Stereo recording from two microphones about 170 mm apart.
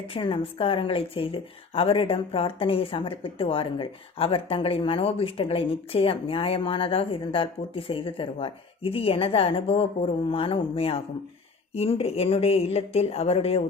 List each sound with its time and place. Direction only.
0.1 s a woman's voice: 30° left (ahead or behind)